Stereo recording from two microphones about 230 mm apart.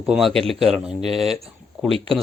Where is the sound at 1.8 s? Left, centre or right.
Right.